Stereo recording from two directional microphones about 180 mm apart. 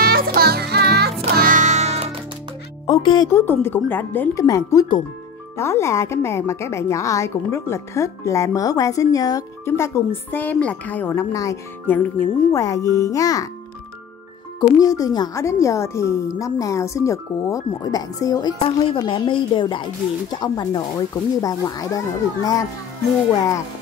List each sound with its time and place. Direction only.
0.0 s music: 55° right (ahead or behind)
1.3 s music: 50° right (ahead or behind)
2.9 s music: 25° left (ahead or behind)
3.3 s a woman's voice: 10° left (ahead or behind)
12.5 s speech: 20° left (ahead or behind)
14.6 s a woman's voice: 20° left (ahead or behind)